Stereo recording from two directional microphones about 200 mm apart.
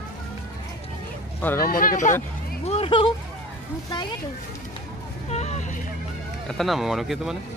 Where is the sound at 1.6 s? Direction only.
45° left (ahead or behind).